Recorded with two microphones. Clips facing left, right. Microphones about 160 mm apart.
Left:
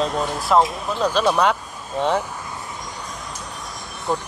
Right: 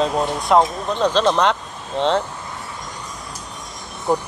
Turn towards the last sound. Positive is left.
turn(degrees=-15)  # may be behind; listen again after turning